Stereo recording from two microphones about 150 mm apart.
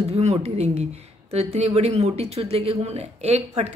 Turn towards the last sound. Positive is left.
turn(degrees=-45)  # may be behind; listen again after turning